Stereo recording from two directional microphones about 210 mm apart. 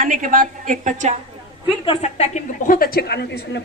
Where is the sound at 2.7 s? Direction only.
45° left (ahead or behind).